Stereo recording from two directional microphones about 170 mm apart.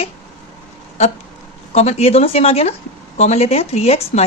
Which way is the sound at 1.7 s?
40° left (ahead or behind).